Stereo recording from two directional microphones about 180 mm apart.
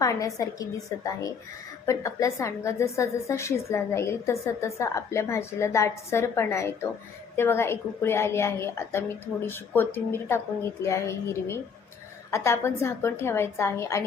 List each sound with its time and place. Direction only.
0.0 s a woman's voice: 20° left (ahead or behind)